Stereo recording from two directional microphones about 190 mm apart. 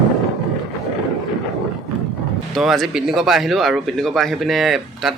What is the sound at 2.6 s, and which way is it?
Speech, centre (ahead or behind).